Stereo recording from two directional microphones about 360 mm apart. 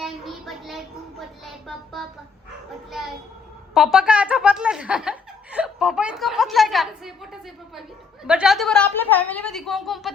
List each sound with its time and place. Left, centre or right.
0.0 s child singing: centre
3.8 s speech: centre